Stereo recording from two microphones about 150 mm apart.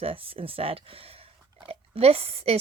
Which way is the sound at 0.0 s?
40° right (ahead or behind).